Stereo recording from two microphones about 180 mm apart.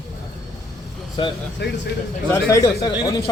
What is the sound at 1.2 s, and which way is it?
Speech, 30° left (ahead or behind).